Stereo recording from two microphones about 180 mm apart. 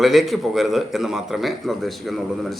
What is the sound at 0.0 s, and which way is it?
A man's voice, centre (ahead or behind).